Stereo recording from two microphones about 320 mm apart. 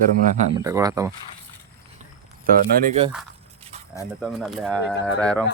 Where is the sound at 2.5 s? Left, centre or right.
Right.